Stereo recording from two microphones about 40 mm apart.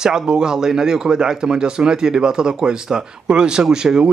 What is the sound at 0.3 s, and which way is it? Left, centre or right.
A man's voice, centre.